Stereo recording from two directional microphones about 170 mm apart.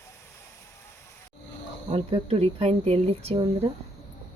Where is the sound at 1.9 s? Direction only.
35° right (ahead or behind).